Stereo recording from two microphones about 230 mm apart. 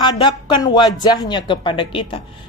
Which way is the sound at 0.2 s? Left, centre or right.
Centre.